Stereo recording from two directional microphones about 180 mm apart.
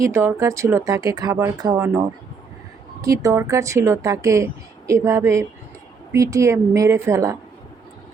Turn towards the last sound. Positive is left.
turn(degrees=-15)  # may be behind; listen again after turning